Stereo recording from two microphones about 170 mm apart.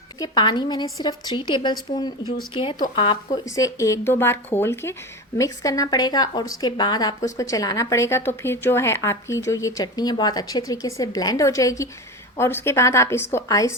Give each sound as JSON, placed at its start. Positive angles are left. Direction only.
{"t": 0.2, "sound": "a woman's voice", "side_deg": 25}
{"t": 3.3, "sound": "a woman's voice", "side_deg": 20}